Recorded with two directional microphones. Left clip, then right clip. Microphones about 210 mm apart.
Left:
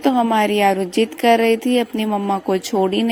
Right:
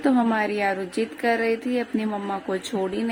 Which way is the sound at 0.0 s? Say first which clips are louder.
Left 6 dB; 30° left (ahead or behind).